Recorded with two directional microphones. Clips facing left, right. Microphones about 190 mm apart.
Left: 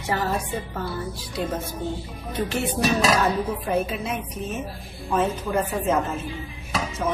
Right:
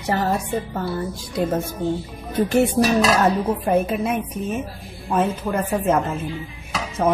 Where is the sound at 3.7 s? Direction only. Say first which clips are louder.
Right 7 dB; 55° right (ahead or behind).